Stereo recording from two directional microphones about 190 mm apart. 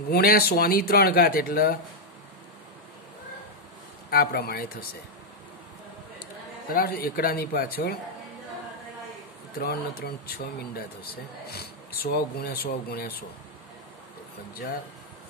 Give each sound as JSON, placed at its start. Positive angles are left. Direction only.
{"t": 0.1, "sound": "speech", "side_deg": 55}
{"t": 4.1, "sound": "speech", "side_deg": 50}
{"t": 6.7, "sound": "speech", "side_deg": 50}
{"t": 9.6, "sound": "speech", "side_deg": 55}
{"t": 11.5, "sound": "speech", "side_deg": 55}